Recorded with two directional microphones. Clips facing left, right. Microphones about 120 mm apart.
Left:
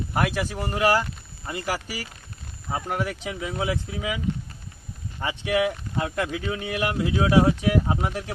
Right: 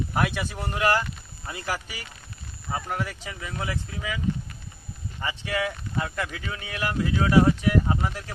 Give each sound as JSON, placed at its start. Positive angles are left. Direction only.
{"t": 0.1, "sound": "speech", "side_deg": 0}
{"t": 2.6, "sound": "speech", "side_deg": 15}
{"t": 5.2, "sound": "speech", "side_deg": 15}